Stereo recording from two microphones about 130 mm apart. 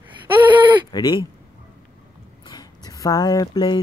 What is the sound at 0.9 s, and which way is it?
Speech, 35° left (ahead or behind).